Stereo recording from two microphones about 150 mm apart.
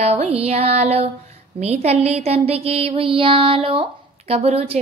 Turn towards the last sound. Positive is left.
turn(degrees=-40)  # may be behind; listen again after turning